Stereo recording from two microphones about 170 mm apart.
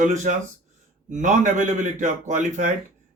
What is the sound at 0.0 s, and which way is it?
Speech, 45° right (ahead or behind).